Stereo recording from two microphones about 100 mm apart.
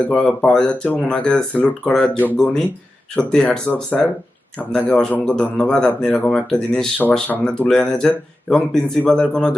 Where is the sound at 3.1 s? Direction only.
10° left (ahead or behind).